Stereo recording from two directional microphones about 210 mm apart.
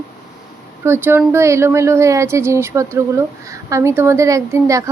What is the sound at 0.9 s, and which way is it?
Speech, 10° right (ahead or behind).